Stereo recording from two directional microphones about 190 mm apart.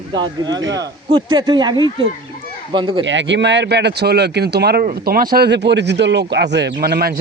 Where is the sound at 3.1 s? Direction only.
70° right (ahead or behind).